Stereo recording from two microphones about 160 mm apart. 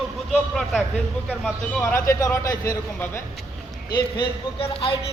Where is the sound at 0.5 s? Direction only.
Centre (ahead or behind).